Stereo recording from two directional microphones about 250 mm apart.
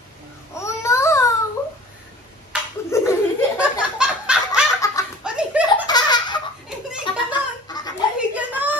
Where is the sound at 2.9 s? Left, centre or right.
Centre.